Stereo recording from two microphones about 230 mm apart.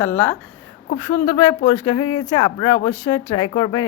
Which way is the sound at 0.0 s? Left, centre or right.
Centre.